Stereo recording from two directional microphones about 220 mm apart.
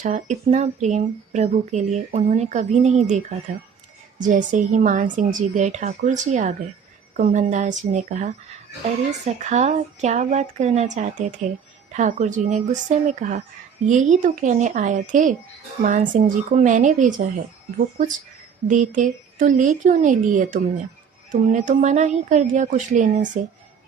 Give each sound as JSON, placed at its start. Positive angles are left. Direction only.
{"t": 0.0, "sound": "speech", "side_deg": -35}
{"t": 18.7, "sound": "speech", "side_deg": -35}